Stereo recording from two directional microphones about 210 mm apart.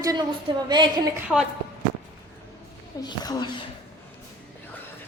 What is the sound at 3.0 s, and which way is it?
Speech, 20° left (ahead or behind).